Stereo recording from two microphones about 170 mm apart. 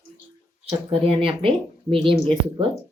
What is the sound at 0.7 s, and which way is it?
Speech, 35° right (ahead or behind).